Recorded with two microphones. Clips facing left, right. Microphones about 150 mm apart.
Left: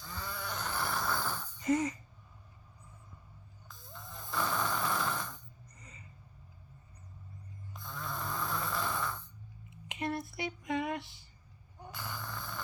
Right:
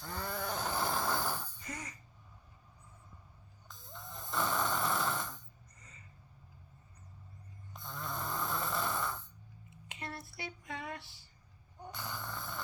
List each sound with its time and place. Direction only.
0.0 s vehicle: 55° right (ahead or behind)
0.7 s vehicle: 25° right (ahead or behind)
1.6 s speech: 25° left (ahead or behind)
3.9 s snoring: centre (ahead or behind)
7.7 s snoring: centre (ahead or behind)
9.6 s a sound: 20° left (ahead or behind)
11.8 s snoring: centre (ahead or behind)